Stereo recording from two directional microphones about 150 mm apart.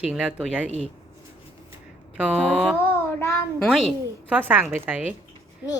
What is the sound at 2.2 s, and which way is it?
Speech, 5° right (ahead or behind).